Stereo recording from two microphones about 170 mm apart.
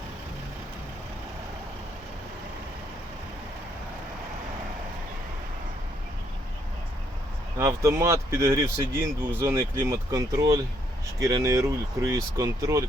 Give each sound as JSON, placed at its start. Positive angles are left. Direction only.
{"t": 7.6, "sound": "speech", "side_deg": -15}